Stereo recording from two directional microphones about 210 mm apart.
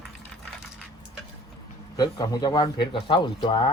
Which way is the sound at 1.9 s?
20° left (ahead or behind).